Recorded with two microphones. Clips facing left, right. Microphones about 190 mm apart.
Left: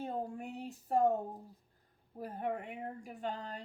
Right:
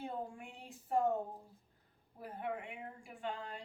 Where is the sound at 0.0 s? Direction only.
40° left (ahead or behind).